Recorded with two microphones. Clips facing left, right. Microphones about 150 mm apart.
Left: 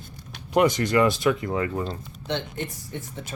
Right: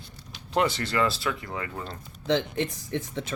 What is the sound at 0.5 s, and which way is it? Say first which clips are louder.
Speech: left 5 dB; 15° left (ahead or behind).